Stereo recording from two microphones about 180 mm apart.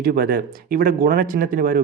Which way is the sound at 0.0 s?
55° right (ahead or behind).